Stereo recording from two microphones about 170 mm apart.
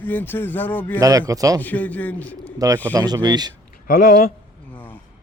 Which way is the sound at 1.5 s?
10° left (ahead or behind).